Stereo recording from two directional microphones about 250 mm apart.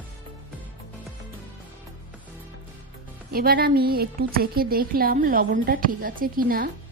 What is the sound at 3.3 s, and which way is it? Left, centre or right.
A woman's voice, right.